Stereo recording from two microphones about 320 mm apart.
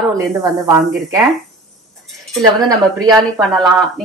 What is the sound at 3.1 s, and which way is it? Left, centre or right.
Speech, centre.